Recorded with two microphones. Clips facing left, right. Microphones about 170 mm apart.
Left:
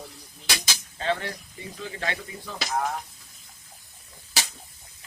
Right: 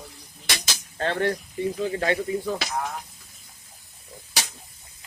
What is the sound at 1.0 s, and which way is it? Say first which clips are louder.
Speech: right 4 dB; 55° right (ahead or behind).